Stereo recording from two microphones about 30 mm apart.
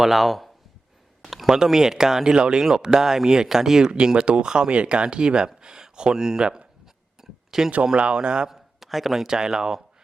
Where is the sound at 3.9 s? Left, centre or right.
Right.